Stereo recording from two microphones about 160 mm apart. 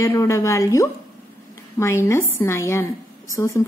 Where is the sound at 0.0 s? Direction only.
15° left (ahead or behind).